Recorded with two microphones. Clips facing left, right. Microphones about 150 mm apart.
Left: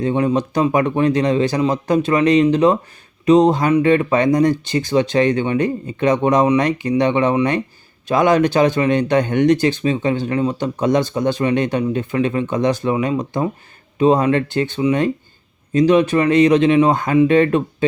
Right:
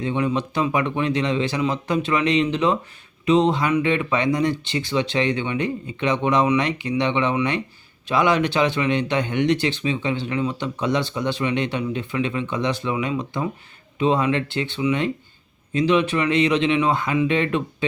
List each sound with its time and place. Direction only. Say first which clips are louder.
0.0 s speech: left 5 dB; 40° left (ahead or behind)